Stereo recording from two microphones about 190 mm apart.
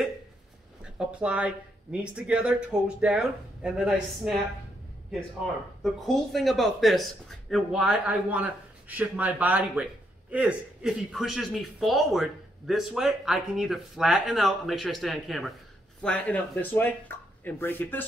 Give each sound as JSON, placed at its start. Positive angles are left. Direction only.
{"t": 0.9, "sound": "speech", "side_deg": -5}
{"t": 5.8, "sound": "speech", "side_deg": 0}